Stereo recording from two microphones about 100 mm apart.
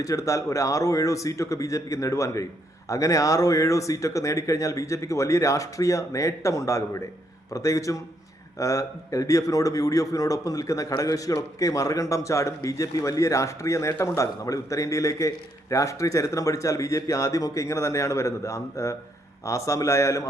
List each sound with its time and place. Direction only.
0.0 s a man's voice: 35° left (ahead or behind)